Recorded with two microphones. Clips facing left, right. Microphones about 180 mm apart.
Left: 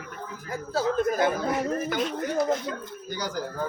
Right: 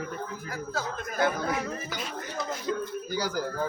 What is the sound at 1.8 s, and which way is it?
Speech, 55° left (ahead or behind).